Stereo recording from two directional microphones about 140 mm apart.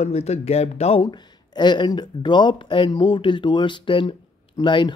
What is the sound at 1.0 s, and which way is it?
Speech, 30° left (ahead or behind).